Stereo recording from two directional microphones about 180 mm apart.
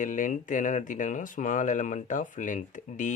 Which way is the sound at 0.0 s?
45° left (ahead or behind).